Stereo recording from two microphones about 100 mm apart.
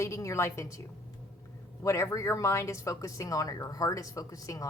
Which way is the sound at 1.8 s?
30° left (ahead or behind).